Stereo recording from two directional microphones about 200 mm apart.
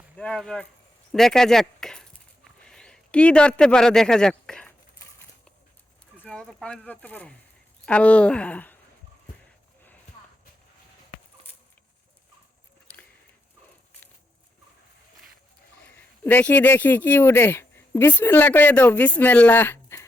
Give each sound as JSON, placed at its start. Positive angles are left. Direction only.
{"t": 0.2, "sound": "speech", "side_deg": 5}
{"t": 1.1, "sound": "a sound", "side_deg": 0}
{"t": 6.2, "sound": "speech", "side_deg": 5}
{"t": 15.8, "sound": "speech", "side_deg": 10}